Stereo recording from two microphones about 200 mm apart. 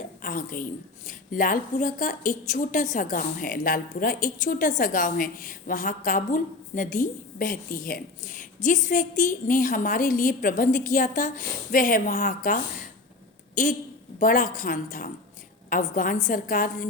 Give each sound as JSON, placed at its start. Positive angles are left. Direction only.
{"t": 0.2, "sound": "a woman's voice", "side_deg": 45}
{"t": 13.6, "sound": "a woman's voice", "side_deg": 40}